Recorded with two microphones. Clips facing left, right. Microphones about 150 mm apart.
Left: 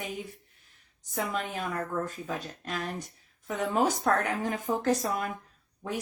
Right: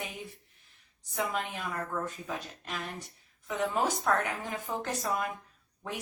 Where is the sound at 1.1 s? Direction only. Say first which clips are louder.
Left 1 dB; 45° left (ahead or behind).